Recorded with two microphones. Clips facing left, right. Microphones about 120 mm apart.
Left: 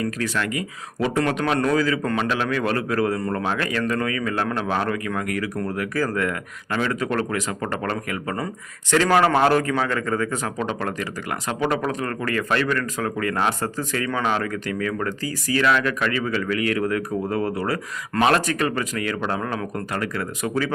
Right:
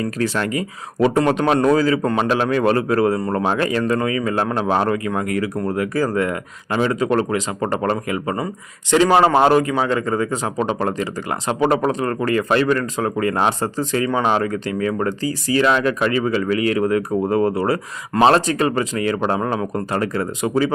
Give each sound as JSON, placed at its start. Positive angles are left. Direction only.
{"t": 0.0, "sound": "a man's voice", "side_deg": -35}